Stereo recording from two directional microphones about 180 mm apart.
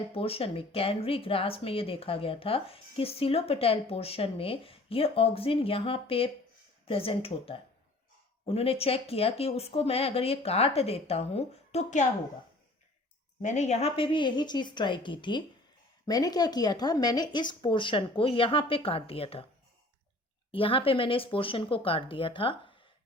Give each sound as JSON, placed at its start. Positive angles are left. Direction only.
{"t": 0.1, "sound": "speech", "side_deg": 30}
{"t": 13.4, "sound": "speech", "side_deg": 40}
{"t": 20.5, "sound": "speech", "side_deg": 30}